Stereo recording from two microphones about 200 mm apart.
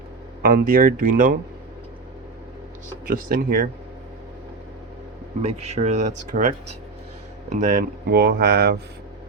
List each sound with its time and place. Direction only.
0.4 s speech: 45° right (ahead or behind)
3.1 s speech: 45° right (ahead or behind)
5.4 s speech: 35° right (ahead or behind)
7.5 s speech: 40° right (ahead or behind)